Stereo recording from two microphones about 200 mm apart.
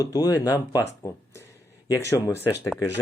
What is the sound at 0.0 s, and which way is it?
Speech, 15° left (ahead or behind).